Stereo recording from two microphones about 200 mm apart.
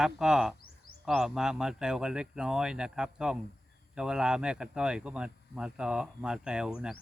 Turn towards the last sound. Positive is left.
turn(degrees=-5)  # may be behind; listen again after turning